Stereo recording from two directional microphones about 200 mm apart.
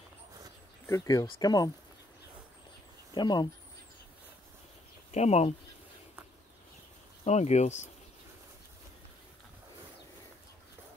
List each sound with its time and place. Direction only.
0.8 s speech: 15° left (ahead or behind)
3.2 s speech: 20° left (ahead or behind)
5.1 s speech: 30° left (ahead or behind)
7.2 s speech: 35° left (ahead or behind)